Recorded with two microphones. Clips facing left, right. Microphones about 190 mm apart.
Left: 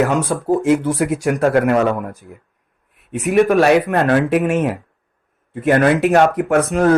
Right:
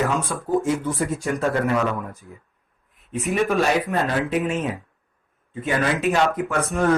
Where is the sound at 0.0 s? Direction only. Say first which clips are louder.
Left 7 dB; 75° left (ahead or behind).